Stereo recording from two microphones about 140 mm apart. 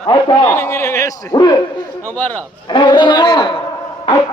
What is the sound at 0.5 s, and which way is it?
Speech, 15° left (ahead or behind).